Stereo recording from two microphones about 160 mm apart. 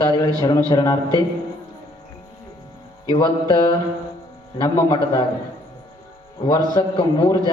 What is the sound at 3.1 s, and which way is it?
A man's voice, 25° left (ahead or behind).